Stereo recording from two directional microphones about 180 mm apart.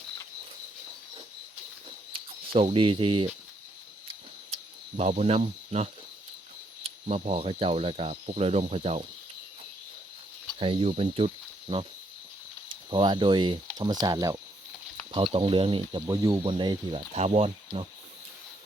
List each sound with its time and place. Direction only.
2.1 s speech: 30° right (ahead or behind)
4.5 s speech: 35° right (ahead or behind)
10.6 s speech: 30° right (ahead or behind)
12.9 s speech: 25° right (ahead or behind)
15.1 s speech: 30° right (ahead or behind)